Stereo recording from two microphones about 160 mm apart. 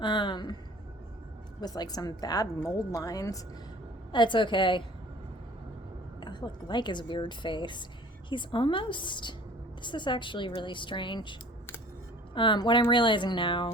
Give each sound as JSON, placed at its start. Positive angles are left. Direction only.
{"t": 0.0, "sound": "a woman's voice", "side_deg": 30}
{"t": 1.6, "sound": "a woman's voice", "side_deg": 25}
{"t": 6.1, "sound": "a woman's voice", "side_deg": 30}